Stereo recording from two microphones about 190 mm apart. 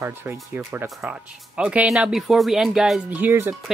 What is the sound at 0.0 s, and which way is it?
A man's voice, 10° right (ahead or behind).